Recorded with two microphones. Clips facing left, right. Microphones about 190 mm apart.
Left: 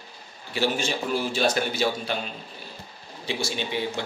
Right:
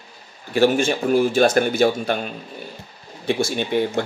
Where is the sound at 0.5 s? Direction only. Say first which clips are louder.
Right 9 dB; 50° right (ahead or behind).